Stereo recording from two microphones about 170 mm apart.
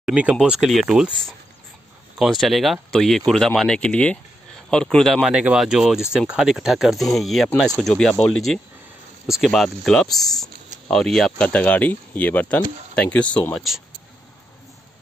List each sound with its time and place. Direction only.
0.0 s speech: 5° right (ahead or behind); by 13.7 s 10° left (ahead or behind)